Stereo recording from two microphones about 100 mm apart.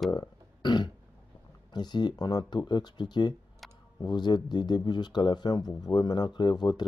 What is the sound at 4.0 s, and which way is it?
Speech, 45° left (ahead or behind).